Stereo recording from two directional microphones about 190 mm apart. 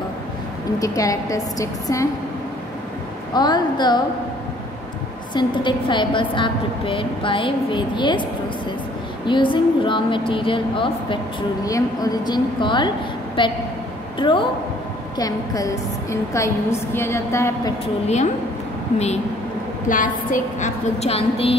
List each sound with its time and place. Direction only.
0.7 s a woman's voice: 15° left (ahead or behind)
3.3 s a woman's voice: 20° left (ahead or behind)
5.3 s a woman's voice: 25° left (ahead or behind)
18.0 s a woman's voice: 35° left (ahead or behind)
19.9 s a woman's voice: 45° left (ahead or behind)